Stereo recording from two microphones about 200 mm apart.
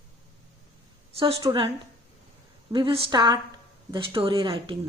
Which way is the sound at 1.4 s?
25° right (ahead or behind).